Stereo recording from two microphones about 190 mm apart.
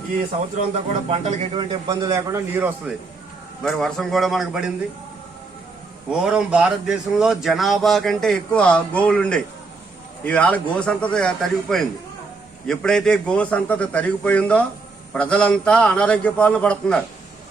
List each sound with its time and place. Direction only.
0.7 s speech: 30° right (ahead or behind); by 2.9 s 10° right (ahead or behind)
3.6 s speech: centre (ahead or behind)
6.1 s a man's voice: 5° right (ahead or behind)